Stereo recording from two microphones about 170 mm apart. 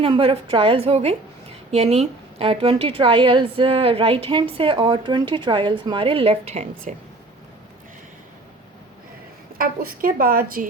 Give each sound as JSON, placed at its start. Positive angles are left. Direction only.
{"t": 0.0, "sound": "a woman's voice", "side_deg": -35}
{"t": 9.6, "sound": "a woman's voice", "side_deg": -55}